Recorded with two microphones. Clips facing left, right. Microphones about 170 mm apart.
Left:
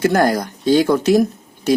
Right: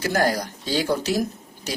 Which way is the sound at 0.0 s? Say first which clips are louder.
Left 7 dB; 60° left (ahead or behind).